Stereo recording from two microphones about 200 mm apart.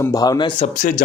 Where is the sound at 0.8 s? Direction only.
40° left (ahead or behind).